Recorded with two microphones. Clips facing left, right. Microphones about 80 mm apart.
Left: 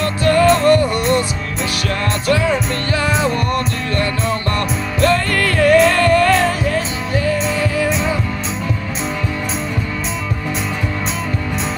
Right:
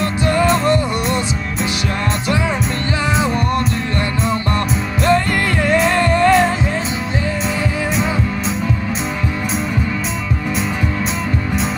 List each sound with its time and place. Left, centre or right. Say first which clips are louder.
0.0 s music: left 3 dB; centre
2.2 s music: left 5 dB; centre